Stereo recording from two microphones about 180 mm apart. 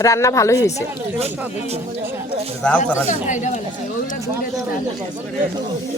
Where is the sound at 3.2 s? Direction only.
45° left (ahead or behind).